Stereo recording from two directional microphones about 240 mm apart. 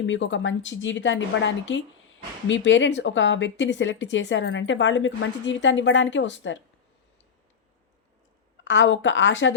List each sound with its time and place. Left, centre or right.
0.0 s speech: left
8.6 s speech: left